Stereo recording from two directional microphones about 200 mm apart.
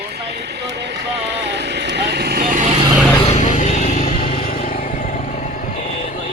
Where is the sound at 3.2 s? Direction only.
35° left (ahead or behind).